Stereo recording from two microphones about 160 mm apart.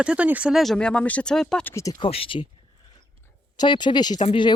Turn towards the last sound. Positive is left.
turn(degrees=30)  # may be behind; listen again after turning